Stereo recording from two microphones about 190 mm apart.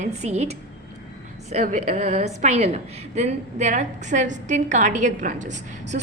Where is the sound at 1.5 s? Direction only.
45° right (ahead or behind).